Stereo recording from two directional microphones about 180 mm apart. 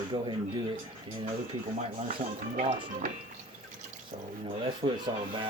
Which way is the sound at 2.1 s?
45° right (ahead or behind).